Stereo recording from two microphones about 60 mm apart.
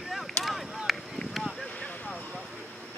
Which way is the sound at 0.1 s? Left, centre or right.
Centre.